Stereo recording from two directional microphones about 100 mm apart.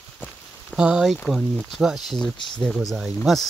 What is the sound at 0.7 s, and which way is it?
Speech, 5° right (ahead or behind).